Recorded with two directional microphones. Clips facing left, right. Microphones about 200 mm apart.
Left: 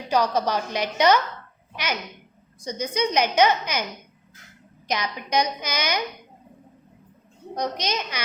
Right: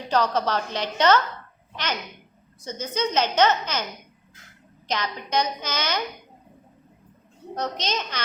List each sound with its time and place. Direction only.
0.1 s a woman's voice: 10° left (ahead or behind)
4.9 s a woman's voice: 10° left (ahead or behind)
7.5 s a woman's voice: 10° left (ahead or behind)